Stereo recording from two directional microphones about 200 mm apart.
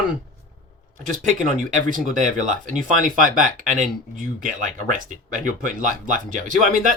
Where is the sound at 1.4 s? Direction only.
40° right (ahead or behind).